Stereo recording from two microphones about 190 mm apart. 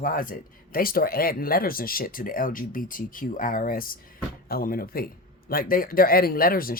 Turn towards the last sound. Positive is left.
turn(degrees=50)  # may be behind; listen again after turning